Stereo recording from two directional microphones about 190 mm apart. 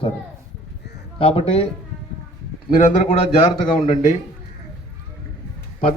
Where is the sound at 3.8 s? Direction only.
40° left (ahead or behind).